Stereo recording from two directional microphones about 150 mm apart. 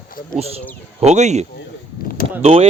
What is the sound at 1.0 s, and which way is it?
Speech, 50° right (ahead or behind).